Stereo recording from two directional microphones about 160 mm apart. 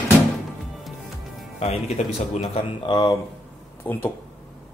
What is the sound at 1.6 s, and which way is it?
Speech, 40° left (ahead or behind).